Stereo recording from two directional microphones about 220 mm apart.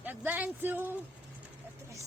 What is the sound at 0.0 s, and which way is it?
Speech, 10° right (ahead or behind).